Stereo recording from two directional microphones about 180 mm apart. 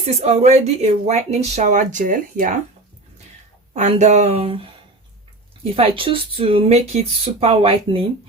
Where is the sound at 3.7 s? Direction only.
40° right (ahead or behind).